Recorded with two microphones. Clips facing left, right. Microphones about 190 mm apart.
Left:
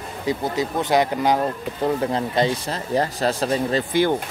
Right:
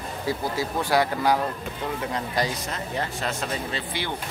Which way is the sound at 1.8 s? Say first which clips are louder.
Left 8 dB; 30° left (ahead or behind).